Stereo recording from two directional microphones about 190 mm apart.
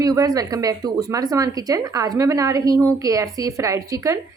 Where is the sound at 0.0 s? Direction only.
20° right (ahead or behind).